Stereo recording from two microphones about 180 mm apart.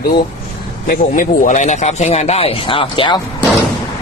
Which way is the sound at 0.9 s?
50° left (ahead or behind).